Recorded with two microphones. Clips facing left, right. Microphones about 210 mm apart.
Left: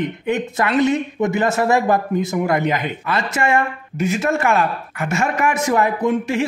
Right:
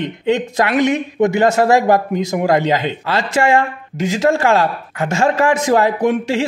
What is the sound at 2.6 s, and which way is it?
Speech, 25° right (ahead or behind).